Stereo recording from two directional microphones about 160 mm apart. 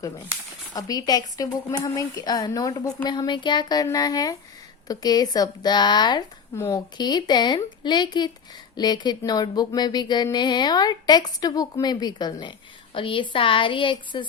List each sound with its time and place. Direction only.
0.7 s a woman's voice: 25° left (ahead or behind)